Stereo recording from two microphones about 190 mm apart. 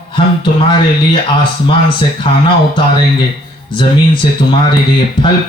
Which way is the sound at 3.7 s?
25° left (ahead or behind).